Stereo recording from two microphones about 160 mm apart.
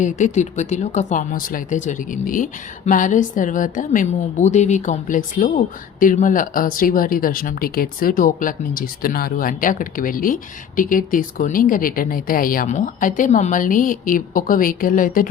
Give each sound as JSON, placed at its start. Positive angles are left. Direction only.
{"t": 0.0, "sound": "speech", "side_deg": 50}